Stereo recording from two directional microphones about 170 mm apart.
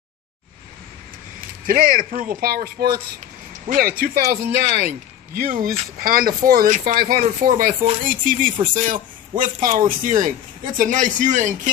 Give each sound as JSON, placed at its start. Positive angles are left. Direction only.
{"t": 1.7, "sound": "speech", "side_deg": -55}